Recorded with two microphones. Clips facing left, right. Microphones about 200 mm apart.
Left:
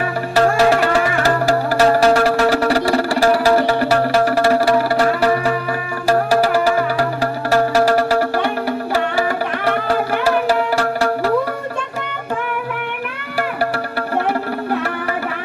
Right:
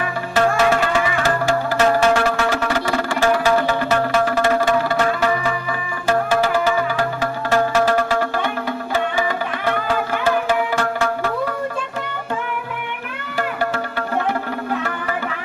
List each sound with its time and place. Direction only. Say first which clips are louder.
0.3 s music: left 3 dB; 35° left (ahead or behind)
10.2 s tabla: left 2 dB; 35° left (ahead or behind)